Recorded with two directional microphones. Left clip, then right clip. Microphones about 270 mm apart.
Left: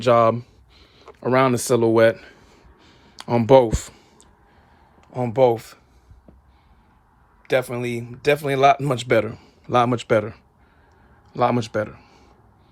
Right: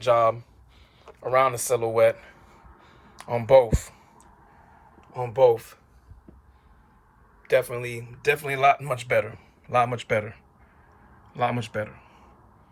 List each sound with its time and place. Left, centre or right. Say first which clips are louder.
0.0 s speech: left 4 dB; left
5.1 s speech: left 2 dB; left
7.4 s speech: left 2 dB; left